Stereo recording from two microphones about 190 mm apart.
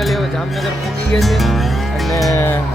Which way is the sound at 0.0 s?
Centre (ahead or behind).